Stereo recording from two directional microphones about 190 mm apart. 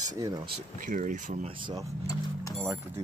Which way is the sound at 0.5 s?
40° right (ahead or behind).